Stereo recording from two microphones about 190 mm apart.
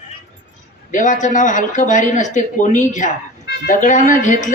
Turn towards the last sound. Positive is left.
turn(degrees=45)  # may be behind; listen again after turning